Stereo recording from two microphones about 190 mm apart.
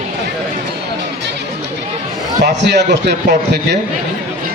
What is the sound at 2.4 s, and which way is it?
A man's voice, 60° right (ahead or behind).